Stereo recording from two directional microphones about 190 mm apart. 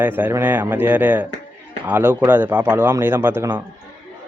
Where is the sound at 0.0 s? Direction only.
10° right (ahead or behind).